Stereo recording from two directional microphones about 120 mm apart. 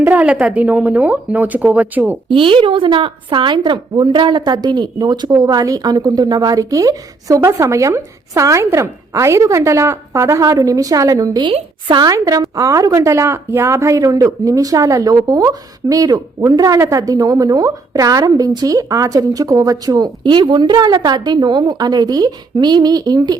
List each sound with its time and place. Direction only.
0.0 s speech: 15° right (ahead or behind)
2.3 s a woman's voice: 45° right (ahead or behind)